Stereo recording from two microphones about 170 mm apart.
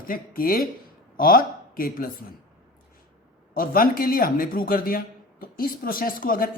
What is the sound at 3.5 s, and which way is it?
A man's voice, 55° left (ahead or behind).